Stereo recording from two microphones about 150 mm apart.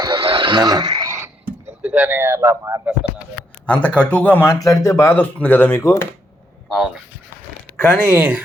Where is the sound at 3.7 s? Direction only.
10° left (ahead or behind).